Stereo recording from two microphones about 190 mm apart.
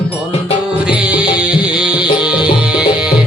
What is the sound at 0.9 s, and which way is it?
Music, 5° right (ahead or behind).